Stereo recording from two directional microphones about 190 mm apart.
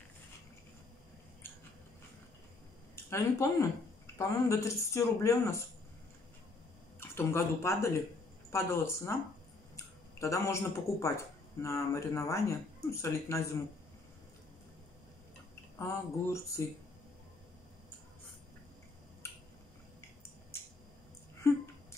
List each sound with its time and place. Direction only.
3.1 s speech: 15° left (ahead or behind)
7.0 s speech: 15° left (ahead or behind)
15.8 s speech: 15° left (ahead or behind)
21.4 s a sound: 15° left (ahead or behind)